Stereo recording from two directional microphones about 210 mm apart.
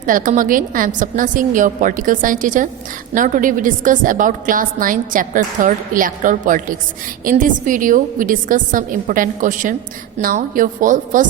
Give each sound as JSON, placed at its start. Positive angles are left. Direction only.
{"t": 0.0, "sound": "a woman's voice", "side_deg": -40}